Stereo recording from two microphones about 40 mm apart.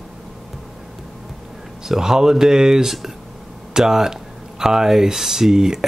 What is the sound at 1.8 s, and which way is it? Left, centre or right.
Speech, centre.